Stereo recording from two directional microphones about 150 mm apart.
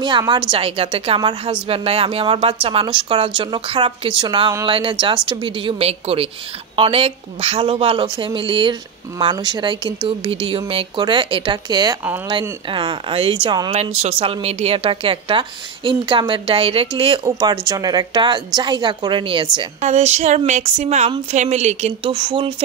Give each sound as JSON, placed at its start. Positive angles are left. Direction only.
{"t": 0.5, "sound": "a woman's voice", "side_deg": -40}
{"t": 13.7, "sound": "a woman's voice", "side_deg": -45}
{"t": 19.8, "sound": "speech", "side_deg": -50}
{"t": 22.1, "sound": "a woman's voice", "side_deg": -35}